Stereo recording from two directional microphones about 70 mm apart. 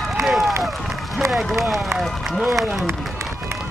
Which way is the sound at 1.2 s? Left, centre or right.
Centre.